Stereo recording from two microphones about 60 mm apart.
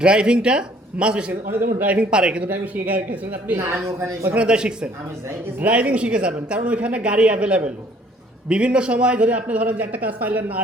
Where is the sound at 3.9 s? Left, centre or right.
Right.